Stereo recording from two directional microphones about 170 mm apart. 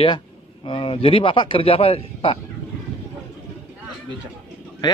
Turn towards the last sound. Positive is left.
turn(degrees=25)  # may be behind; listen again after turning